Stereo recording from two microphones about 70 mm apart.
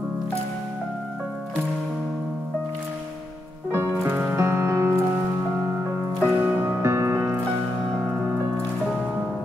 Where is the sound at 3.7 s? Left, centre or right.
Right.